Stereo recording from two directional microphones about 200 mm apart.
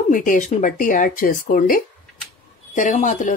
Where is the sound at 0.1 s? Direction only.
40° left (ahead or behind).